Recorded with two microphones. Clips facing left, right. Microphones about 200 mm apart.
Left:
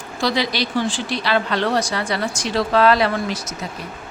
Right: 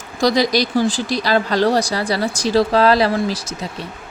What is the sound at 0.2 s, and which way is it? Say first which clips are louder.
Speech: right 5 dB; 40° right (ahead or behind).